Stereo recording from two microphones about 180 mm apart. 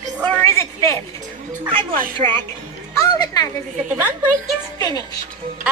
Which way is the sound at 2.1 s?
25° right (ahead or behind).